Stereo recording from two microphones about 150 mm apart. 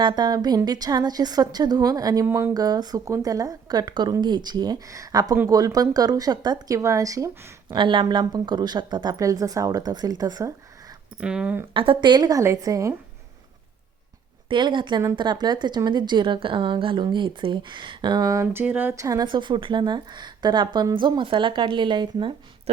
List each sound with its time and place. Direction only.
0.0 s speech: 30° right (ahead or behind)
7.7 s speech: 35° right (ahead or behind)
11.2 s speech: 5° right (ahead or behind)
11.7 s speech: 35° right (ahead or behind)
14.5 s speech: 30° right (ahead or behind)
18.4 s speech: 10° right (ahead or behind); by 22.7 s 35° right (ahead or behind)